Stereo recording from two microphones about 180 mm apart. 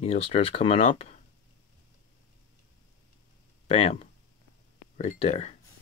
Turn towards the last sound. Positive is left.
turn(degrees=35)  # may be behind; listen again after turning